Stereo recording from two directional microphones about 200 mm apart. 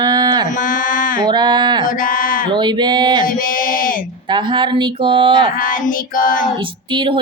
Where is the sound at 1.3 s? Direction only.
20° right (ahead or behind).